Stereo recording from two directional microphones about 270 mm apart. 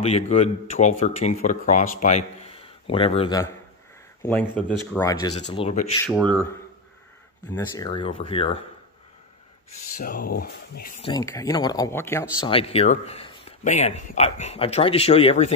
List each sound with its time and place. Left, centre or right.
0.0 s speech: left
4.2 s speech: centre; by 5.9 s left
6.0 s speech: centre
7.5 s speech: centre
9.9 s speech: left
11.0 s speech: centre